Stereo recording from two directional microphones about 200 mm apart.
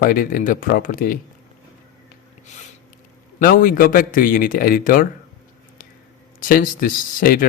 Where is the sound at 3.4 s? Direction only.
45° left (ahead or behind).